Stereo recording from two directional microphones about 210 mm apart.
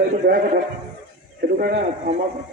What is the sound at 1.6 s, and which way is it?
Speech, 50° right (ahead or behind).